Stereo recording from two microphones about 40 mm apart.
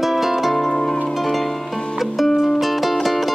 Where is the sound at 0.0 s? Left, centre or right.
Centre.